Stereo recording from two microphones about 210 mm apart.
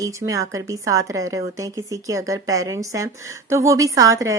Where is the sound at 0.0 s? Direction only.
15° right (ahead or behind).